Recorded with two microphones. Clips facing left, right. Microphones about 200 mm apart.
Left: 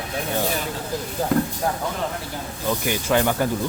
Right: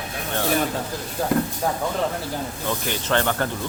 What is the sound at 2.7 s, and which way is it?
Speech, 10° left (ahead or behind).